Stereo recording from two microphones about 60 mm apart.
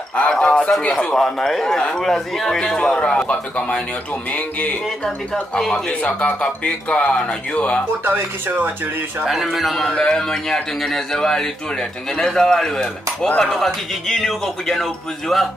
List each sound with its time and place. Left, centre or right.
0.1 s speech: left
5.0 s speech: centre
8.0 s speech: right
9.3 s a man's voice: centre